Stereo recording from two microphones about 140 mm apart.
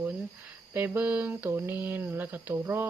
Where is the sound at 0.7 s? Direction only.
15° right (ahead or behind).